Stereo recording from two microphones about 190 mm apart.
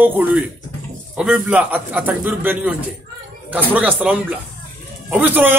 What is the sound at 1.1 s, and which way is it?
A man's voice, 5° right (ahead or behind).